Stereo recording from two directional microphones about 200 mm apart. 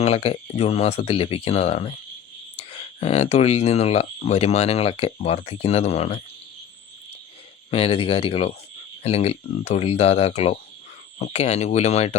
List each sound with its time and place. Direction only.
0.0 s speech: 30° left (ahead or behind)
7.7 s speech: 30° left (ahead or behind)